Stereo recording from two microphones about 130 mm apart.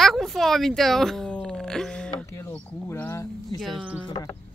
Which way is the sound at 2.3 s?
20° left (ahead or behind).